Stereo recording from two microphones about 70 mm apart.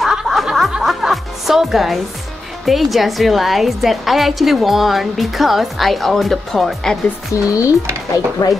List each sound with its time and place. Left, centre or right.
0.0 s music: centre
2.6 s a woman's voice: centre
7.3 s speech: left
8.4 s speech: left